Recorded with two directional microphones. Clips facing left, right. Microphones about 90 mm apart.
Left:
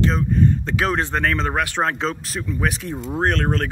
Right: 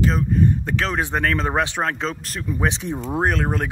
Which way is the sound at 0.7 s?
5° left (ahead or behind).